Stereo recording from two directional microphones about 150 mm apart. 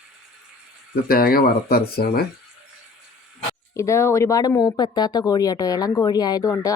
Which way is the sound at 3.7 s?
20° left (ahead or behind).